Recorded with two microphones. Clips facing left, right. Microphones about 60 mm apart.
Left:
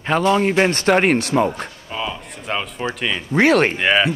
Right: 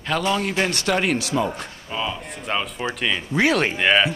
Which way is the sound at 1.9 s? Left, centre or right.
Centre.